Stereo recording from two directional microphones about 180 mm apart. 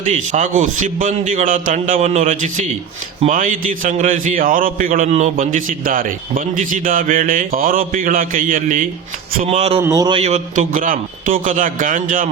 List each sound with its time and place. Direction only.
0.3 s a man's voice: 45° right (ahead or behind)
9.5 s speech: 35° right (ahead or behind)
9.8 s a man's voice: 20° right (ahead or behind)
10.2 s a man's voice: 40° right (ahead or behind)